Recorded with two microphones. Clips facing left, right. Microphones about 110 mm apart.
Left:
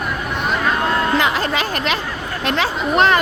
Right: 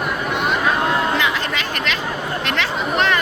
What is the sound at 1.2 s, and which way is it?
Chatter, 40° left (ahead or behind).